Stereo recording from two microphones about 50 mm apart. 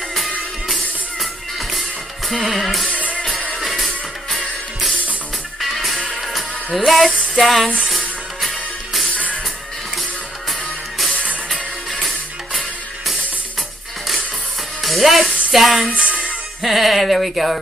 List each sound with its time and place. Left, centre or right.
0.1 s music: centre
5.6 s music: centre
6.9 s speech: centre
7.9 s music: centre
9.1 s music: left
14.8 s music: centre
16.6 s speech: centre